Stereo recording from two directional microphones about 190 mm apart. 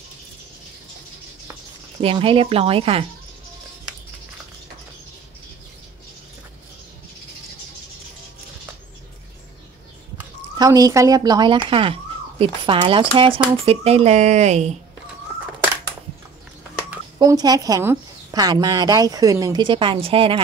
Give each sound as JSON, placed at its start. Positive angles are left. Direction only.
{"t": 2.0, "sound": "speech", "side_deg": -30}
{"t": 10.6, "sound": "speech", "side_deg": -15}
{"t": 17.2, "sound": "speech", "side_deg": -20}